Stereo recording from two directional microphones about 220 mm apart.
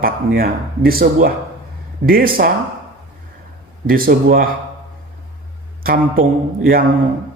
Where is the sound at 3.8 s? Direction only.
40° right (ahead or behind).